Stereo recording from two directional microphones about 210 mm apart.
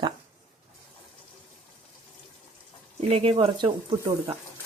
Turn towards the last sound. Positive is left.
turn(degrees=-25)  # may be behind; listen again after turning